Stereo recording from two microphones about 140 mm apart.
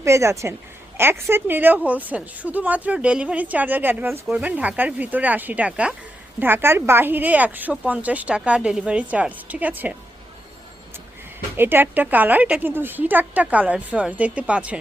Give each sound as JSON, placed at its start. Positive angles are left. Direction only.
{"t": 0.0, "sound": "a woman's voice", "side_deg": -20}
{"t": 11.5, "sound": "a woman's voice", "side_deg": -15}